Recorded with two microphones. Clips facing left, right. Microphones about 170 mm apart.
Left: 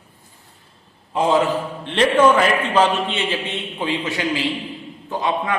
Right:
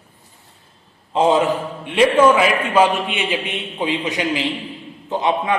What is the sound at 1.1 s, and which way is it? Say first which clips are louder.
A man's voice: right 2 dB; 20° right (ahead or behind).